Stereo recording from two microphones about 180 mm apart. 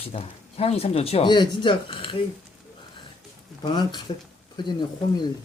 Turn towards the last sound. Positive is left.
turn(degrees=25)  # may be behind; listen again after turning